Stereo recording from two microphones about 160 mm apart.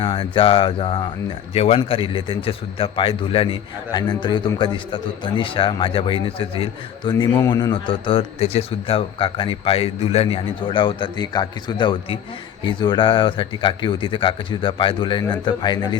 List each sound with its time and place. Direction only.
0.0 s a man's voice: 35° left (ahead or behind)